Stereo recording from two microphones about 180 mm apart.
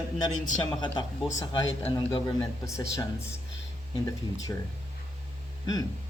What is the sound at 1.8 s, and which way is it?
A man's voice, 25° left (ahead or behind).